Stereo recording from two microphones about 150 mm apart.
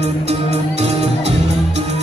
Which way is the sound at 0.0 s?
45° right (ahead or behind).